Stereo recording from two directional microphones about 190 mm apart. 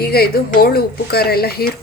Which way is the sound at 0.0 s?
55° left (ahead or behind).